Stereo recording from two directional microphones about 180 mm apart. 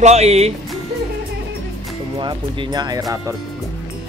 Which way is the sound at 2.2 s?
25° right (ahead or behind).